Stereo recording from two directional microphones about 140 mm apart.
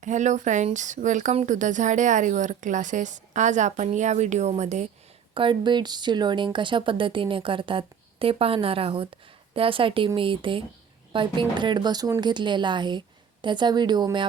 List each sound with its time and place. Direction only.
0.0 s speech: 60° right (ahead or behind)
5.3 s speech: 35° right (ahead or behind)